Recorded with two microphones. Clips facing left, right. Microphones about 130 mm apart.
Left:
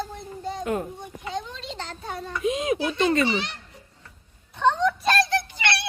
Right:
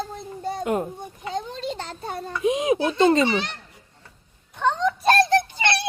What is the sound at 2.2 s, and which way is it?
A child's voice, 25° right (ahead or behind).